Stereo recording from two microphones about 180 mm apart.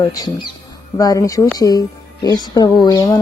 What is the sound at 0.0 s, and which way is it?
Speech, 20° left (ahead or behind).